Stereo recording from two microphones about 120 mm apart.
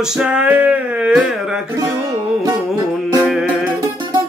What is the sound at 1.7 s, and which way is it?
Music, 30° right (ahead or behind).